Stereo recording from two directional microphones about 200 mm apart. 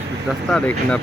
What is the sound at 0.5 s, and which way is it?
Speech, 5° left (ahead or behind).